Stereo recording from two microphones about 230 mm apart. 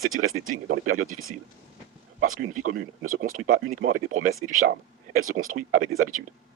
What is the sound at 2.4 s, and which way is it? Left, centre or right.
Speech, right.